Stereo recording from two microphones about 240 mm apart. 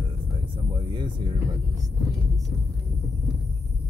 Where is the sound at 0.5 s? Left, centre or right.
Centre.